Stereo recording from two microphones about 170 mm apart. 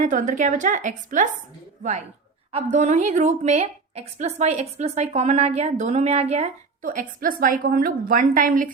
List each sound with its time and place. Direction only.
0.0 s a woman's voice: 50° right (ahead or behind)
6.8 s a woman's voice: 50° right (ahead or behind)